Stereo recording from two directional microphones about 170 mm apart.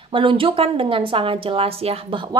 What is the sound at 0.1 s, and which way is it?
A woman's voice, 30° right (ahead or behind).